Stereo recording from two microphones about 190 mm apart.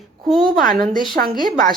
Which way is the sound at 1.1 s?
50° right (ahead or behind).